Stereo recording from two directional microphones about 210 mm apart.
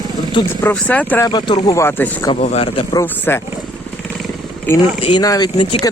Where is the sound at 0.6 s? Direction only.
5° left (ahead or behind).